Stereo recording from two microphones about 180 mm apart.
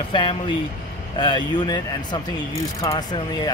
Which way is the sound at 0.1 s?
30° left (ahead or behind).